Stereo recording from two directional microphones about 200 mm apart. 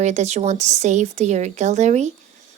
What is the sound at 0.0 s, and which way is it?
A woman's voice, 35° right (ahead or behind).